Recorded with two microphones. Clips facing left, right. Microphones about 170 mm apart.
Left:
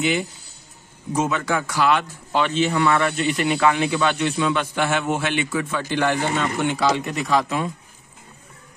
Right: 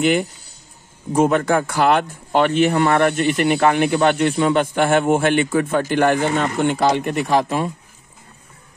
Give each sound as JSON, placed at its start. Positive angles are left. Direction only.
{"t": 0.0, "sound": "speech", "side_deg": -50}